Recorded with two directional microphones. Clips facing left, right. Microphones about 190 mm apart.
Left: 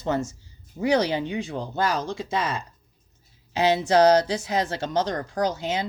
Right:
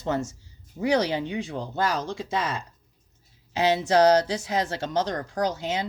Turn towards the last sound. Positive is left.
turn(degrees=20)  # may be behind; listen again after turning